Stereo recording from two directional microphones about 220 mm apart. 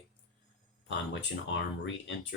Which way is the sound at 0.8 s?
55° left (ahead or behind).